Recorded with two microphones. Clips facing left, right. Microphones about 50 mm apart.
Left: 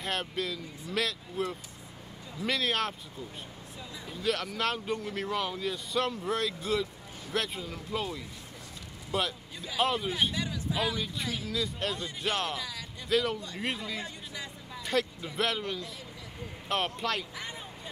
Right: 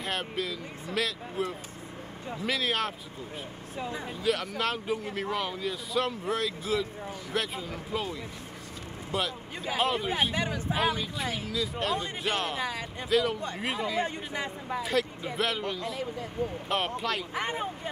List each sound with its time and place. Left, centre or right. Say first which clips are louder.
0.0 s speech: right 1 dB; centre
3.7 s speech: right 9 dB; right
4.2 s speech: right 1 dB; centre
9.8 s speech: even; centre
10.3 s speech: right 3 dB; right
11.0 s speech: right 2 dB; centre
11.5 s speech: right 4 dB; centre
12.5 s speech: right 6 dB; right
13.1 s speech: right 2 dB; centre
14.0 s speech: right 8 dB; right
14.8 s speech: right 1 dB; centre
16.6 s speech: left 2 dB; centre
17.3 s speech: right 9 dB; right